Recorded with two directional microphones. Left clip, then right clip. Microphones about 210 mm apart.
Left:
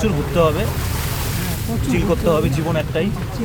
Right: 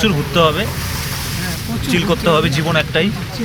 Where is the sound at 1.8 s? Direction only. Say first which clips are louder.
Right 3 dB; centre (ahead or behind).